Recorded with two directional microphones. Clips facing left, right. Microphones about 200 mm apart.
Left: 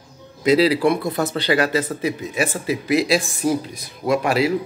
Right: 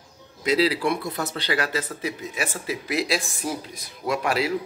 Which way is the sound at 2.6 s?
5° left (ahead or behind).